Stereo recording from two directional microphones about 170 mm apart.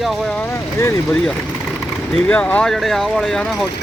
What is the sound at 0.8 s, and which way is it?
Speech, 15° left (ahead or behind).